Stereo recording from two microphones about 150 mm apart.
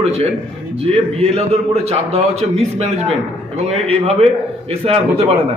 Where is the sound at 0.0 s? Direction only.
45° right (ahead or behind).